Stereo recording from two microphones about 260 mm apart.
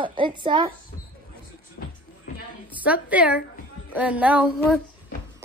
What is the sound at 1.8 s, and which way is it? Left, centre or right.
Music, left.